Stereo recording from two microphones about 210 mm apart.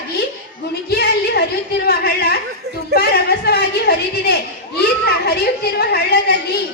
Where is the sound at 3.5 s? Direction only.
50° left (ahead or behind).